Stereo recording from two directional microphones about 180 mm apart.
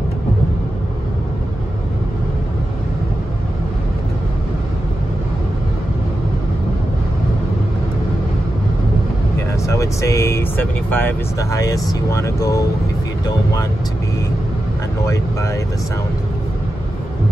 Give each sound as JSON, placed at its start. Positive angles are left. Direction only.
{"t": 9.7, "sound": "speech", "side_deg": 15}